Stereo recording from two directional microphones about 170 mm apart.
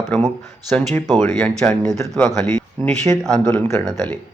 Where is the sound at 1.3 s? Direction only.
5° left (ahead or behind).